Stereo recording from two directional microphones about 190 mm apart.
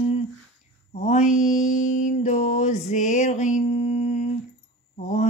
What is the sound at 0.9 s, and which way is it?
Mantra, 35° left (ahead or behind).